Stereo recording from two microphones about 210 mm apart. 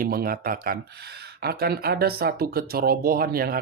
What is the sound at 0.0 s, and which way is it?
Speech, 45° right (ahead or behind).